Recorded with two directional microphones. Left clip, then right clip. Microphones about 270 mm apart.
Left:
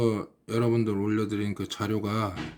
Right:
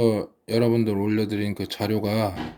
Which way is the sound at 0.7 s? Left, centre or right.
Centre.